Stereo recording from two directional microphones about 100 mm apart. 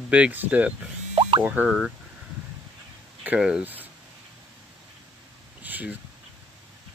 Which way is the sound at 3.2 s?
10° right (ahead or behind).